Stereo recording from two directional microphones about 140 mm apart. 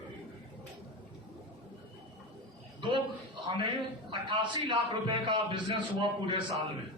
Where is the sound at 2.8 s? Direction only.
35° right (ahead or behind).